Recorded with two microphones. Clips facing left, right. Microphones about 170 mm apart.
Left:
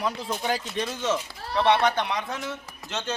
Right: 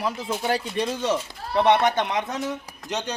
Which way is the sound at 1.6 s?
20° right (ahead or behind).